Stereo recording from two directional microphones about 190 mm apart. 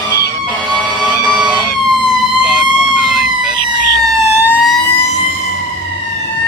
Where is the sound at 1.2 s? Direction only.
5° right (ahead or behind).